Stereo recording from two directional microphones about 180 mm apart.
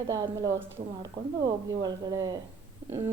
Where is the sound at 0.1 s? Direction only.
20° right (ahead or behind).